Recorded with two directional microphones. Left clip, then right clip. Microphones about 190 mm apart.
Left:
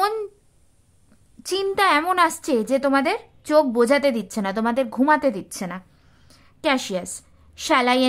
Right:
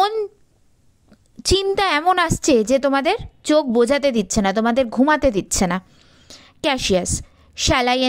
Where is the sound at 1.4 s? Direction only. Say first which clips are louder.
Right 6 dB; 30° right (ahead or behind).